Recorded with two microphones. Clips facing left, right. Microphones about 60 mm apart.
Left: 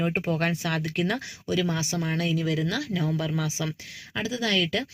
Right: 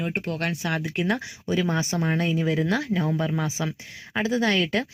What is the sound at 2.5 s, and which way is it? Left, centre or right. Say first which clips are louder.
Speech: right 3 dB; centre.